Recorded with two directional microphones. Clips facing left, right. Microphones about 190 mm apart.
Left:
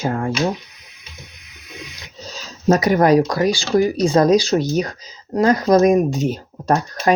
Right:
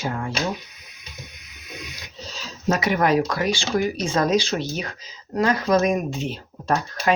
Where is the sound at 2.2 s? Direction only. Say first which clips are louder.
Left 4 dB; 40° left (ahead or behind).